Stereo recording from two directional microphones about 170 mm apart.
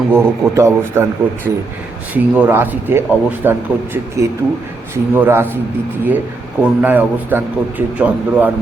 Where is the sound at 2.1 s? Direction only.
10° right (ahead or behind).